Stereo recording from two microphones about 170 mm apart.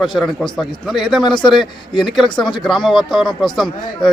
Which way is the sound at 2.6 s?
Centre (ahead or behind).